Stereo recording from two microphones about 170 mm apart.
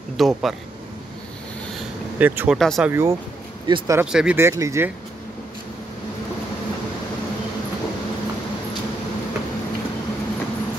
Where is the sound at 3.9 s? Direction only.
5° right (ahead or behind).